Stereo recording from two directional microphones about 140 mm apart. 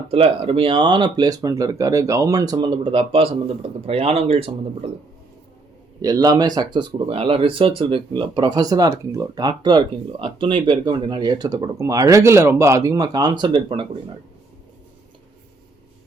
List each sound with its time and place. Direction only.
0.1 s speech: 40° right (ahead or behind)
6.0 s speech: 25° right (ahead or behind)